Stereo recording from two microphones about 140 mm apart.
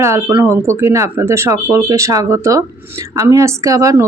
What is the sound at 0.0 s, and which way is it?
Speech, 20° right (ahead or behind).